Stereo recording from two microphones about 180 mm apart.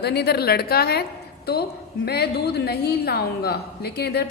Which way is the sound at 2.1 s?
60° left (ahead or behind).